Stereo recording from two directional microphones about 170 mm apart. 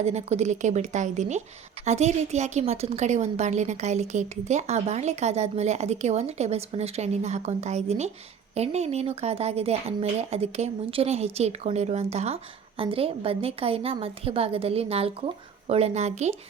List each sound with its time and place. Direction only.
0.0 s a woman's voice: 40° right (ahead or behind)